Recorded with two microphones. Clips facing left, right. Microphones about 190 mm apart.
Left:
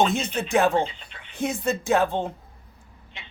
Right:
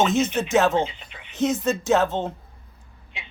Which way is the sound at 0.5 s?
15° left (ahead or behind).